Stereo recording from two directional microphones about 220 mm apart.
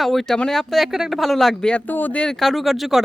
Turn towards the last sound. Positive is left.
turn(degrees=0)  # may be behind; listen again after turning